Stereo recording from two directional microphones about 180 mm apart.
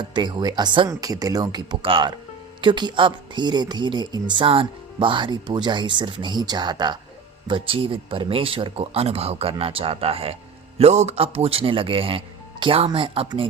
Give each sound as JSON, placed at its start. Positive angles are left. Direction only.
{"t": 0.1, "sound": "speech", "side_deg": -25}